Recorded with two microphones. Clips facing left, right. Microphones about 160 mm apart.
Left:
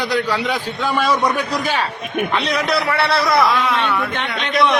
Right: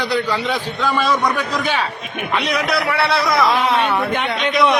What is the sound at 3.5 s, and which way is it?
Speech, 25° right (ahead or behind).